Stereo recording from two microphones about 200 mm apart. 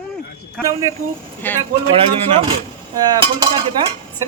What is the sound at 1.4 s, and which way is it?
Speech, 10° left (ahead or behind).